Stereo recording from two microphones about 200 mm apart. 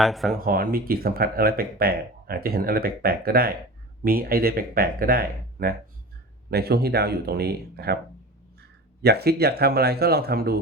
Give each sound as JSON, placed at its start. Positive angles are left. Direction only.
{"t": 0.0, "sound": "speech", "side_deg": 0}
{"t": 0.3, "sound": "speech", "side_deg": -45}
{"t": 9.0, "sound": "speech", "side_deg": -55}